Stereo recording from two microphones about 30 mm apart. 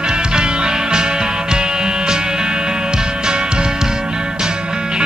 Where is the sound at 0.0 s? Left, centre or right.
Right.